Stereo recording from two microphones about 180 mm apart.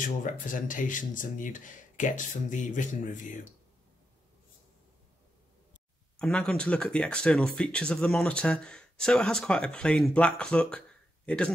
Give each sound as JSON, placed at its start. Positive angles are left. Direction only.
{"t": 0.0, "sound": "speech", "side_deg": 45}
{"t": 6.1, "sound": "speech", "side_deg": 5}